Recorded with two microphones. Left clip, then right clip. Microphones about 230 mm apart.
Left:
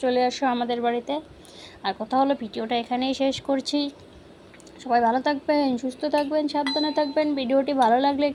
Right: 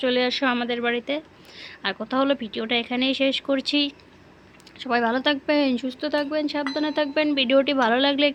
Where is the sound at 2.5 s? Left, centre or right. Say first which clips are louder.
Right 1 dB; right.